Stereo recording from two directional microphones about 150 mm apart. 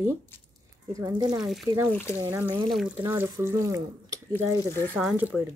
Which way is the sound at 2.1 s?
15° right (ahead or behind).